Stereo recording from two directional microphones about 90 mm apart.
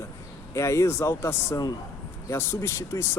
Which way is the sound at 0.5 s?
35° left (ahead or behind).